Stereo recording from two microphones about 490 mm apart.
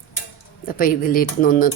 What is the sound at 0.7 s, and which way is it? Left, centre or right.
Speech, centre.